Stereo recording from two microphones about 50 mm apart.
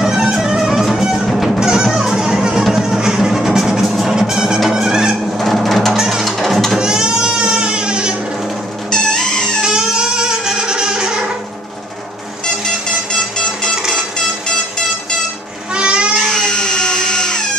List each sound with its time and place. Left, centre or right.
0.0 s music: centre
5.4 s percussion: centre
5.9 s music: centre
6.2 s music: centre
6.8 s music: centre
8.9 s music: centre
9.6 s music: centre
13.9 s vehicle: centre
15.7 s a sound: right
16.1 s a sound: centre